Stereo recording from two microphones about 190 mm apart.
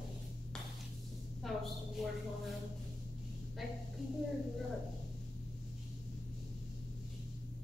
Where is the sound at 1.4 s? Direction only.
Centre (ahead or behind).